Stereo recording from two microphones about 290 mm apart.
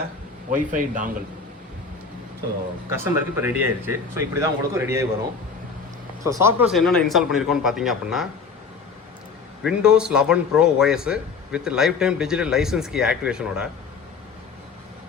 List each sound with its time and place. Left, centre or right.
0.5 s speech: right
2.9 s speech: centre
6.2 s speech: centre
9.6 s speech: centre